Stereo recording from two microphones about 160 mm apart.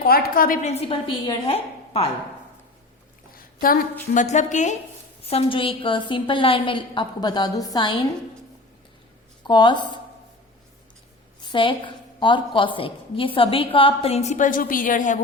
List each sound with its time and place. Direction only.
0.0 s a woman's voice: 70° left (ahead or behind)
0.6 s a woman's voice: 40° left (ahead or behind)
3.3 s a sound: 65° left (ahead or behind)
4.1 s a woman's voice: 50° left (ahead or behind); by 7.9 s 25° left (ahead or behind)
9.4 s a woman's voice: 30° left (ahead or behind)
11.4 s a woman's voice: 30° left (ahead or behind); by 15.2 s 55° left (ahead or behind)